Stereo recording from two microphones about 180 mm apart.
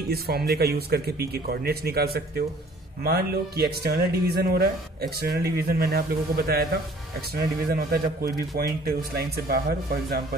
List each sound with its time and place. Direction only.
0.1 s a man's voice: 60° right (ahead or behind)